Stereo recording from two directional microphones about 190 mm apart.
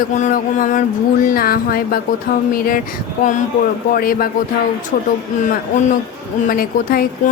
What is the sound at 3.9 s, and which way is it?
Speech, 50° left (ahead or behind).